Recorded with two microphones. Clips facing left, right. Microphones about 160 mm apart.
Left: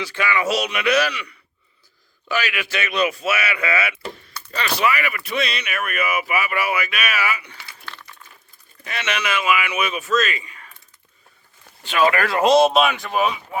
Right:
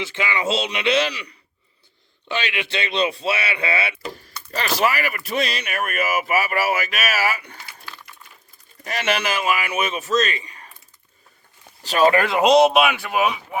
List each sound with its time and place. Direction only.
0.0 s speech: 20° right (ahead or behind); by 7.6 s 45° right (ahead or behind)
8.8 s speech: 40° right (ahead or behind)
11.8 s speech: 35° right (ahead or behind)
12.2 s speech: 20° right (ahead or behind)